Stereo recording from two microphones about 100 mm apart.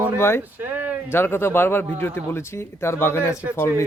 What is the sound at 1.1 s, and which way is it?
A man's voice, 25° left (ahead or behind).